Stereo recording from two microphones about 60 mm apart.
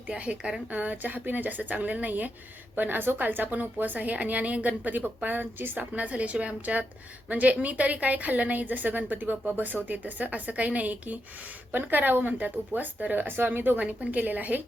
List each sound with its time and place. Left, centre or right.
0.1 s a woman's voice: centre
5.9 s a woman's voice: right